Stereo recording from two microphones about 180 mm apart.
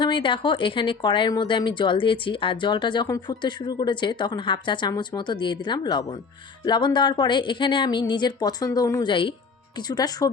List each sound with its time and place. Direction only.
0.0 s a woman's voice: 25° left (ahead or behind)